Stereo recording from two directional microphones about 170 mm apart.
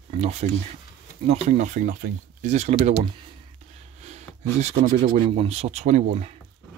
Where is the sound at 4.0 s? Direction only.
40° right (ahead or behind).